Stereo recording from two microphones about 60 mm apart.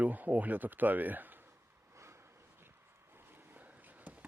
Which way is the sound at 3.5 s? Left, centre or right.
Right.